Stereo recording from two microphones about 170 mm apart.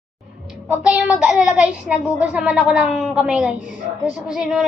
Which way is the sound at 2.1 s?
5° right (ahead or behind).